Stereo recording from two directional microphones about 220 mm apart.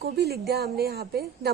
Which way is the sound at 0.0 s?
45° right (ahead or behind).